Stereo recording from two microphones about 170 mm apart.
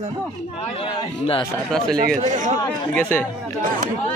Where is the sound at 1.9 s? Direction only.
55° right (ahead or behind).